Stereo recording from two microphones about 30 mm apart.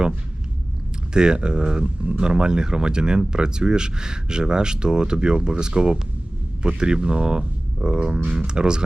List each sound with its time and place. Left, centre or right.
1.1 s speech: right